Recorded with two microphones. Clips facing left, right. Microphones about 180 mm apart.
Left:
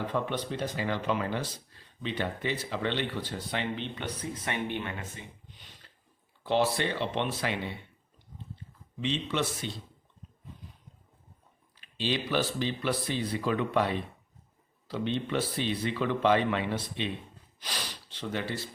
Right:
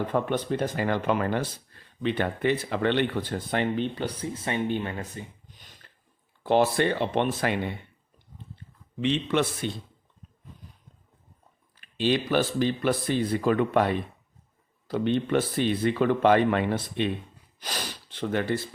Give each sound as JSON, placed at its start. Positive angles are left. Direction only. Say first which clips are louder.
{"t": 0.1, "sound": "speech", "louder": "right 5 dB", "side_deg": -50}
{"t": 3.9, "sound": "speech", "louder": "right 5 dB", "side_deg": -30}
{"t": 9.0, "sound": "speech", "louder": "right 6 dB", "side_deg": -60}
{"t": 11.8, "sound": "speech", "louder": "right 7 dB", "side_deg": -50}